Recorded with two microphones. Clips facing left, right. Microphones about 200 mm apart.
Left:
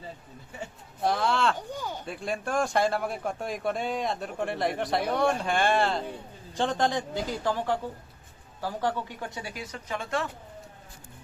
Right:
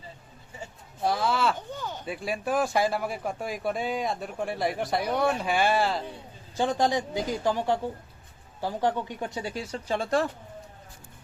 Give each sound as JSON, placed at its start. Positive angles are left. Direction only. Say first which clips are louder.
{"t": 1.0, "sound": "speech", "louder": "even", "side_deg": -5}
{"t": 1.5, "sound": "a sound", "louder": "left 1 dB", "side_deg": 10}
{"t": 2.0, "sound": "speech", "louder": "right 4 dB", "side_deg": -5}